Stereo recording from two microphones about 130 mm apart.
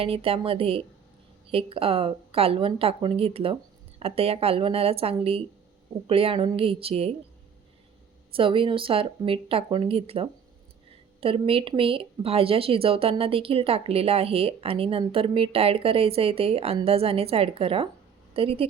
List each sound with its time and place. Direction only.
0.0 s a woman's voice: 45° right (ahead or behind)
8.3 s a woman's voice: 45° right (ahead or behind)